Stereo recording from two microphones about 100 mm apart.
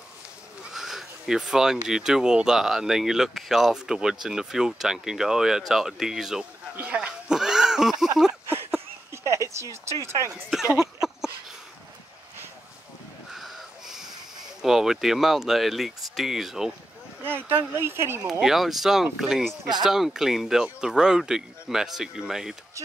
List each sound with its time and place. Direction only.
0.7 s a sound: 5° right (ahead or behind)
1.9 s speech: 5° right (ahead or behind)
6.8 s cat: 10° right (ahead or behind)
8.5 s a sound: 20° right (ahead or behind)
9.9 s speech: 30° right (ahead or behind)
10.8 s a sound: 5° right (ahead or behind)
13.3 s crow: 5° right (ahead or behind)
14.6 s speech: 5° right (ahead or behind)
17.5 s speech: 25° right (ahead or behind)
18.4 s speech: 5° right (ahead or behind)